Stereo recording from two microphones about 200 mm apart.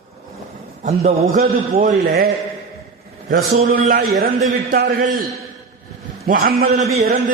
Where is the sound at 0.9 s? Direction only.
35° right (ahead or behind); by 5.1 s 50° right (ahead or behind).